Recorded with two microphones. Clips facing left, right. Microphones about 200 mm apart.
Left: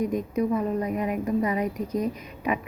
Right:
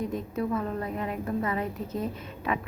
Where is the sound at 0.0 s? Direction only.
15° left (ahead or behind).